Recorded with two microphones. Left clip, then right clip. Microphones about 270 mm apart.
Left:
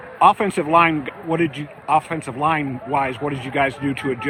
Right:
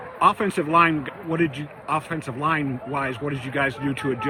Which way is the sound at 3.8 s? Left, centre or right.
Left.